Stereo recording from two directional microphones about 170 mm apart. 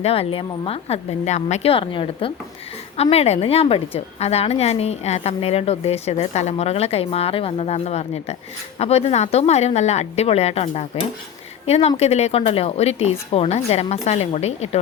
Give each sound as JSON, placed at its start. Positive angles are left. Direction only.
{"t": 0.0, "sound": "a woman's voice", "side_deg": 35}